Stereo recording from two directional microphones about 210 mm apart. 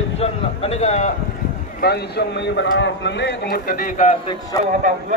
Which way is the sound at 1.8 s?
50° left (ahead or behind).